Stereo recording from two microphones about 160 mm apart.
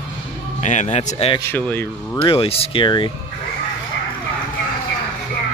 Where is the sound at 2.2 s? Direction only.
35° left (ahead or behind).